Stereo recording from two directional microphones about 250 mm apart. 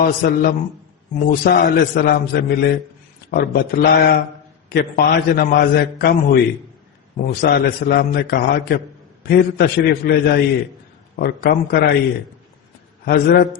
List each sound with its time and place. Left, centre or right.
0.0 s a man's voice: left
13.1 s a man's voice: left